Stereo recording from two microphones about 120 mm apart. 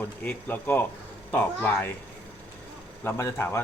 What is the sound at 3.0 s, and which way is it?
Speech, 20° left (ahead or behind).